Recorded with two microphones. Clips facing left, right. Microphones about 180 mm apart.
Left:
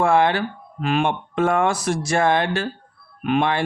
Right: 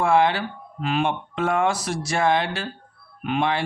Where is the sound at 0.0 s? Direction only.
55° left (ahead or behind).